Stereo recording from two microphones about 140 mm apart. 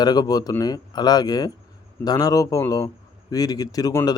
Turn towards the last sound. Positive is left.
turn(degrees=25)  # may be behind; listen again after turning